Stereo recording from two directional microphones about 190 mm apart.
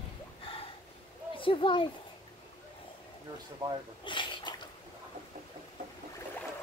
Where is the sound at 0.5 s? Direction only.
30° left (ahead or behind).